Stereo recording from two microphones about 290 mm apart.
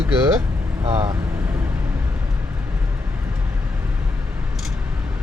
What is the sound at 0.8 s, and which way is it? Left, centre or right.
Speech, right.